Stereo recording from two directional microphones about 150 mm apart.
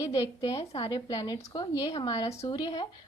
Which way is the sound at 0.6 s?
40° left (ahead or behind).